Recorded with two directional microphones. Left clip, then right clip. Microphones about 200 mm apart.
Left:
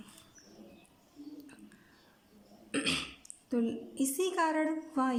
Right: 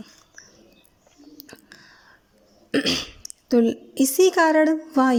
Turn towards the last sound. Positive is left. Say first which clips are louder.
# right 13 dB
turn(degrees=-35)  # may be behind; listen again after turning